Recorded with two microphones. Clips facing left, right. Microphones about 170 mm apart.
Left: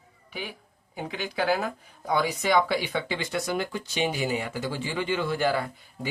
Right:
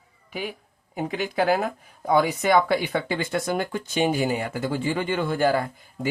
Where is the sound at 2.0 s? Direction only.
55° right (ahead or behind).